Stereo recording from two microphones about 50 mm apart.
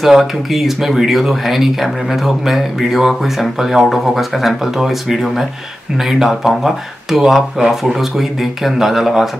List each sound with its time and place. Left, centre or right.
0.0 s speech: centre